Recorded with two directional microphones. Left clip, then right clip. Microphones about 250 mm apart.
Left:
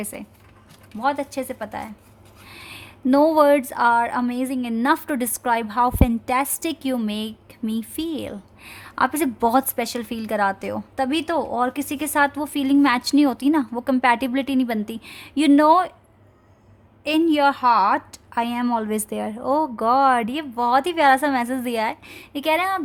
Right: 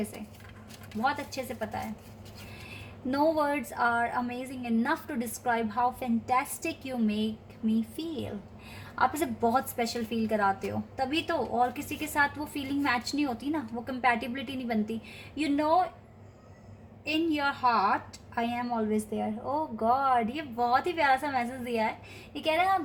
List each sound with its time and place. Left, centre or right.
3.1 s a woman's voice: left
17.0 s a woman's voice: left